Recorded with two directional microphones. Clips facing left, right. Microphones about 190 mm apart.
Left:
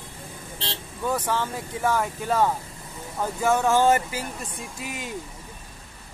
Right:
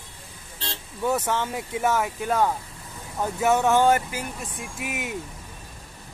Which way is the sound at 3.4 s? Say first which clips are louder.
Right 1 dB; 20° right (ahead or behind).